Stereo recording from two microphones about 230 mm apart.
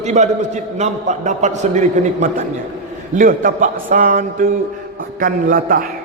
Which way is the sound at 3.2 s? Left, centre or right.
Right.